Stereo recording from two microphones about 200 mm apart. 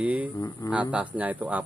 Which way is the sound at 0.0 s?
5° right (ahead or behind).